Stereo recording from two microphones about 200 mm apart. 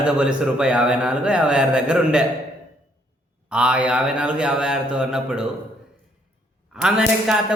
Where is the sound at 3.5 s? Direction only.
5° right (ahead or behind).